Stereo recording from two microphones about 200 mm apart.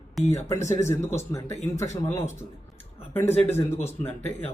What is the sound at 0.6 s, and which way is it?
Speech, 35° left (ahead or behind).